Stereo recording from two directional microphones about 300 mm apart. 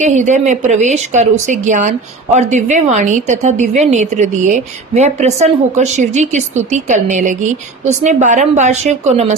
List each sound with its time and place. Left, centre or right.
0.0 s speech: right